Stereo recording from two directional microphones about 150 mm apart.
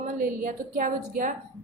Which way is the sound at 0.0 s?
60° right (ahead or behind).